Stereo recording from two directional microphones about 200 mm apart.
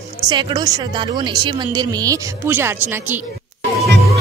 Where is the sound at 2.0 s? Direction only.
10° right (ahead or behind).